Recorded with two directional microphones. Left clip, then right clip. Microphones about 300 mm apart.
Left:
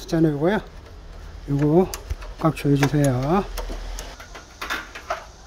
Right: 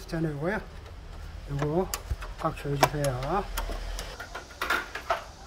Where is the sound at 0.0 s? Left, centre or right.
Left.